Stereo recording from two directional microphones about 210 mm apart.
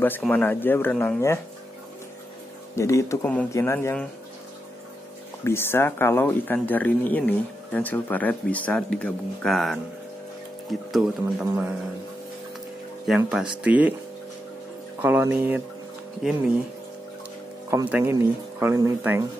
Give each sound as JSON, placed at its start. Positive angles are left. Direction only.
{"t": 0.0, "sound": "speech", "side_deg": 10}
{"t": 2.7, "sound": "speech", "side_deg": 15}
{"t": 5.4, "sound": "speech", "side_deg": 10}
{"t": 13.1, "sound": "speech", "side_deg": 0}
{"t": 15.0, "sound": "speech", "side_deg": -10}
{"t": 17.6, "sound": "speech", "side_deg": -10}